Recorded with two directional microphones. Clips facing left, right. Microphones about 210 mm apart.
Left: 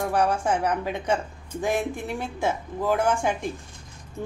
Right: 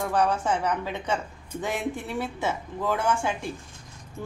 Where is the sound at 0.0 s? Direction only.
10° left (ahead or behind).